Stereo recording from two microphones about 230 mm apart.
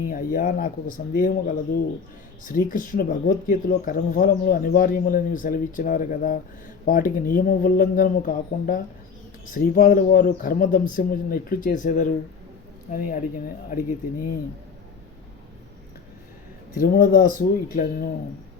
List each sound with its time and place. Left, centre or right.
0.1 s speech: left
16.7 s speech: left